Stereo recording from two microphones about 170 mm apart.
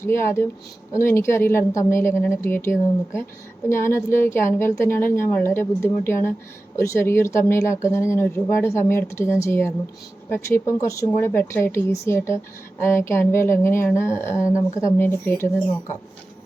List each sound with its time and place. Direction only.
0.0 s speech: 15° left (ahead or behind)